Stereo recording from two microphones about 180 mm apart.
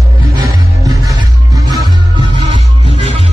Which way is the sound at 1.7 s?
25° right (ahead or behind).